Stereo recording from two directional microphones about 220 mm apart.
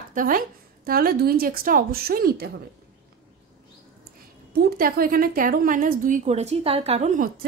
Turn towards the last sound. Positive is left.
turn(degrees=-30)  # may be behind; listen again after turning